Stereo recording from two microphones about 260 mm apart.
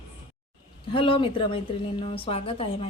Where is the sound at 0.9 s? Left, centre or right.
Left.